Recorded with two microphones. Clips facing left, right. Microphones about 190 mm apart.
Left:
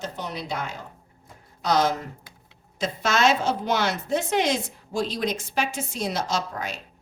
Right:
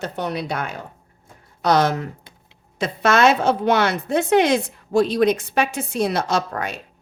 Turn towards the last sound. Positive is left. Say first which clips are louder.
# right 5 dB
turn(degrees=-60)  # may be behind; listen again after turning